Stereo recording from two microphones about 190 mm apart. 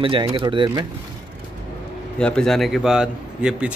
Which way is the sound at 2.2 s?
5° left (ahead or behind).